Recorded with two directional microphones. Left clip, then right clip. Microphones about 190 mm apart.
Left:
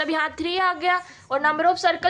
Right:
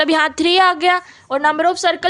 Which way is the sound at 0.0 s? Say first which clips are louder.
Right 9 dB; 65° right (ahead or behind).